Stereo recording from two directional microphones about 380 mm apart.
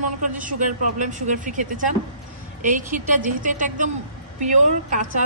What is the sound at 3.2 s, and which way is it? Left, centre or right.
Speech, centre.